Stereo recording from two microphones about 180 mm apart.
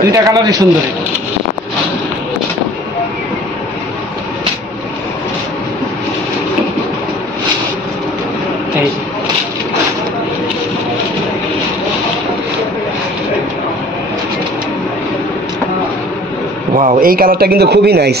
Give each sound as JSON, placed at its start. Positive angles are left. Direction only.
{"t": 0.1, "sound": "a man's voice", "side_deg": -20}
{"t": 16.7, "sound": "a man's voice", "side_deg": -50}